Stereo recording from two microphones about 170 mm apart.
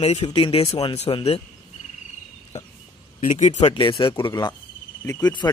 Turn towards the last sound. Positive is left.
turn(degrees=15)  # may be behind; listen again after turning